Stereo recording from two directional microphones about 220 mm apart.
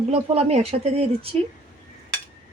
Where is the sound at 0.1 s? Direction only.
30° right (ahead or behind).